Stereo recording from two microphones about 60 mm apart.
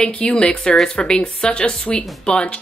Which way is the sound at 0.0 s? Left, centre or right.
Centre.